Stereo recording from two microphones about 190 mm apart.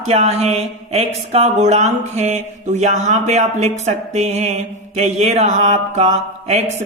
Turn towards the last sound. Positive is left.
turn(degrees=-35)  # may be behind; listen again after turning